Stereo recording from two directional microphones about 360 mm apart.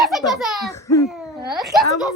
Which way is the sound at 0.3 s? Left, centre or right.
Centre.